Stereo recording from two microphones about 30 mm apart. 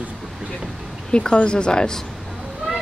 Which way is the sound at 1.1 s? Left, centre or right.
Left.